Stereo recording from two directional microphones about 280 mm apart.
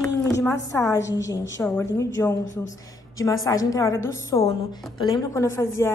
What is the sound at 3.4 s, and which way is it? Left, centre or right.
A woman's voice, centre.